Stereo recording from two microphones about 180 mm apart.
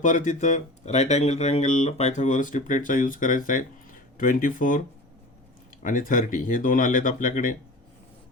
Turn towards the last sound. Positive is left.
turn(degrees=50)  # may be behind; listen again after turning